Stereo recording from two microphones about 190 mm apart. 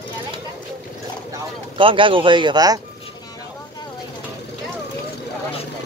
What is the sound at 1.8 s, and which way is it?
Speech, 25° right (ahead or behind).